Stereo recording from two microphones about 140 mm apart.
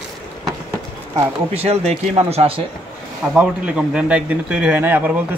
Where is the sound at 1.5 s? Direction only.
50° right (ahead or behind).